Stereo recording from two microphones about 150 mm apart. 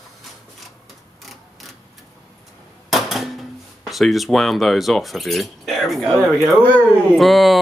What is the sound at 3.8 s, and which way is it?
Speech, centre (ahead or behind).